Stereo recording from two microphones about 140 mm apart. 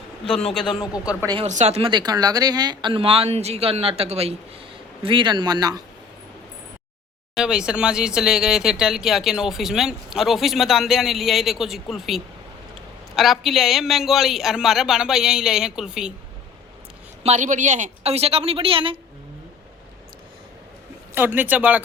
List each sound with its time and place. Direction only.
0.3 s speech: 5° left (ahead or behind)
0.7 s speech: 30° left (ahead or behind)
1.5 s speech: 55° right (ahead or behind)
1.9 s speech: 30° right (ahead or behind); by 4.4 s 45° right (ahead or behind)
5.0 s speech: 35° right (ahead or behind)
7.3 s speech: 5° right (ahead or behind)
17.2 s speech: 60° right (ahead or behind); by 18.9 s 40° right (ahead or behind)
21.2 s speech: 15° right (ahead or behind)